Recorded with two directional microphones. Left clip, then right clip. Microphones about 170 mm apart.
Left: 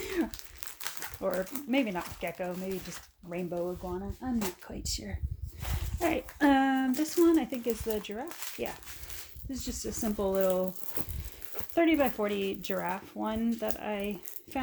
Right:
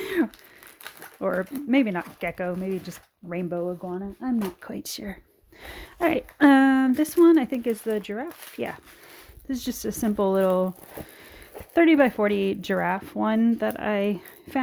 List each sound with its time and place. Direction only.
0.0 s crumpling: 55° right (ahead or behind)
0.8 s crumpling: 10° right (ahead or behind)
1.2 s speech: 60° right (ahead or behind)
9.5 s speech: 65° right (ahead or behind)
11.7 s speech: 70° right (ahead or behind)